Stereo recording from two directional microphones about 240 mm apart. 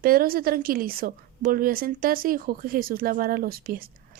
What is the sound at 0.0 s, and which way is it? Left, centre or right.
A woman's voice, right.